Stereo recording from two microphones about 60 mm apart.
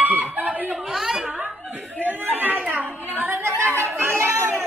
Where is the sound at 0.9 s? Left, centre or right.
Centre.